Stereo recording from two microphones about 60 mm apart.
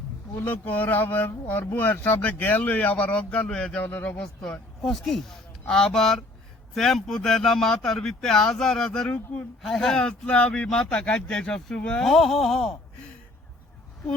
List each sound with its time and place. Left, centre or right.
0.3 s speech: left
4.8 s speech: centre
12.0 s speech: centre